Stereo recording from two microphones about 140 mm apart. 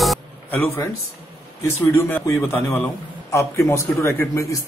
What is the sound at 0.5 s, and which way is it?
A man's voice, 15° left (ahead or behind).